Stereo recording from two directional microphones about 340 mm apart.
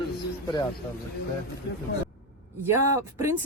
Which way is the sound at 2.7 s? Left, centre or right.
Centre.